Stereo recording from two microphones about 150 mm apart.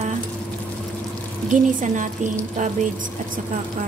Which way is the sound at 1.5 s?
55° right (ahead or behind).